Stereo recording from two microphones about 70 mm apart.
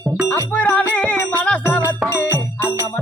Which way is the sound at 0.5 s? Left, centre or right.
Left.